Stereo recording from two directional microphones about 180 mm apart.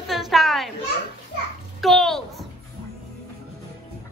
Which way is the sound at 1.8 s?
Centre (ahead or behind).